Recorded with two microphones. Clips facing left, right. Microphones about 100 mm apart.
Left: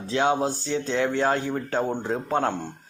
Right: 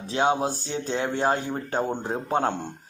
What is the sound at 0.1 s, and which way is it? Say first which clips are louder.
Speech: left 1 dB; 20° right (ahead or behind).